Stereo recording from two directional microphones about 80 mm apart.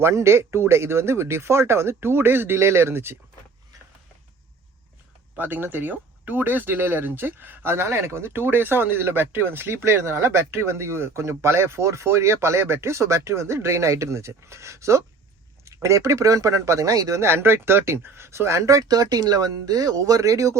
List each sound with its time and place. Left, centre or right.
0.0 s speech: right
5.4 s speech: right